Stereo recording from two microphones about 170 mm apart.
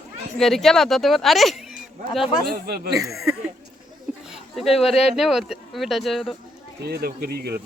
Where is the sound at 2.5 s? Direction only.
70° right (ahead or behind).